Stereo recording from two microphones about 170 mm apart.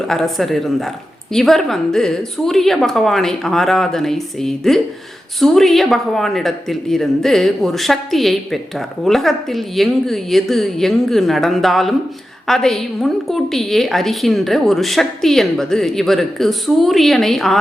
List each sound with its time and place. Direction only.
0.1 s speech: centre (ahead or behind)